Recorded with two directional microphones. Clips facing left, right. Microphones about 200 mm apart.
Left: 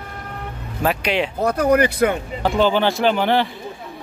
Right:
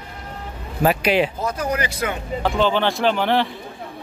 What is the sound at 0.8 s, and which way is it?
Speech, 5° right (ahead or behind).